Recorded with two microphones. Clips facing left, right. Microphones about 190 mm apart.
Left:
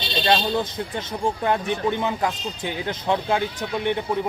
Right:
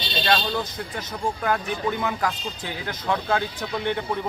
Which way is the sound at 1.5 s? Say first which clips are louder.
Left 2 dB; 25° left (ahead or behind).